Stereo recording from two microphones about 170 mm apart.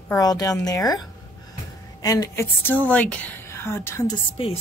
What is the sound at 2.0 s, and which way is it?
A woman's voice, 20° left (ahead or behind).